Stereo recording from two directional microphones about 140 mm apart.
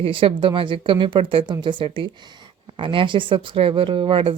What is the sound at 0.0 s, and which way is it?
Speech, 40° right (ahead or behind).